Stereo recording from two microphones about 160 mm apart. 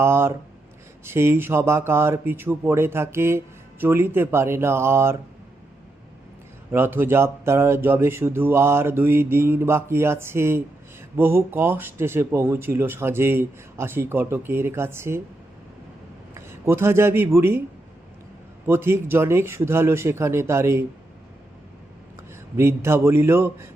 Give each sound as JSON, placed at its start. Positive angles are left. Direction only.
{"t": 0.0, "sound": "speech", "side_deg": -15}
{"t": 6.7, "sound": "speech", "side_deg": -15}
{"t": 16.3, "sound": "speech", "side_deg": -15}
{"t": 18.6, "sound": "speech", "side_deg": -15}
{"t": 22.5, "sound": "speech", "side_deg": -15}